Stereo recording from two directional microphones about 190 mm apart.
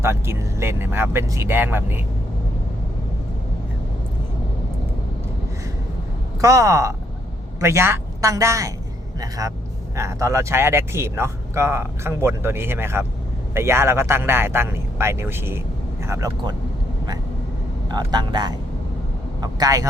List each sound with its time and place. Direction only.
0.0 s speech: 15° right (ahead or behind)
6.4 s speech: 15° right (ahead or behind)
9.9 s speech: 15° right (ahead or behind)
17.8 s speech: 20° right (ahead or behind)